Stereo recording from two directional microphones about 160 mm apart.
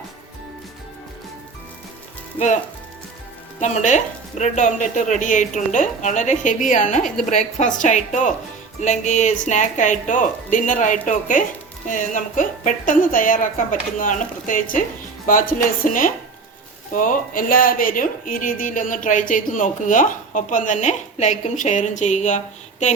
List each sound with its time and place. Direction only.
3.6 s a woman's voice: 45° left (ahead or behind)